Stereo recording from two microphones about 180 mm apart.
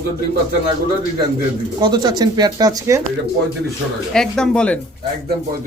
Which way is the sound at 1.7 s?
25° right (ahead or behind).